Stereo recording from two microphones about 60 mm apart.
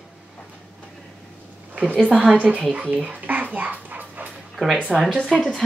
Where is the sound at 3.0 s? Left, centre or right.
Right.